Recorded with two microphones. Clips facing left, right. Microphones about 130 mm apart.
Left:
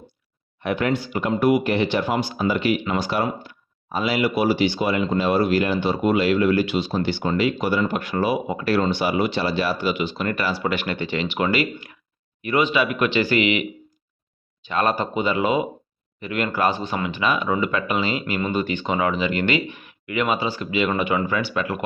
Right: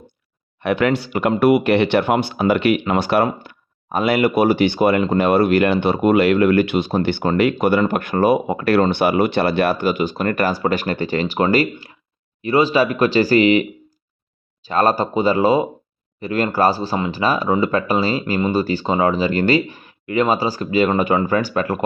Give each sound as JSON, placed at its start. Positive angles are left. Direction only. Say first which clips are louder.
{"t": 0.6, "sound": "speech", "louder": "right 5 dB", "side_deg": -75}